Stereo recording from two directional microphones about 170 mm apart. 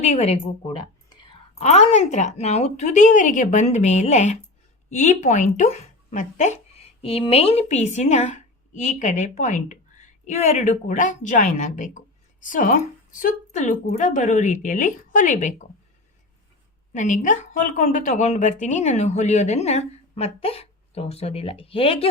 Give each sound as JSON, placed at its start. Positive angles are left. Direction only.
{"t": 0.0, "sound": "speech", "side_deg": 40}
{"t": 1.5, "sound": "a woman's voice", "side_deg": 40}
{"t": 16.9, "sound": "speech", "side_deg": 45}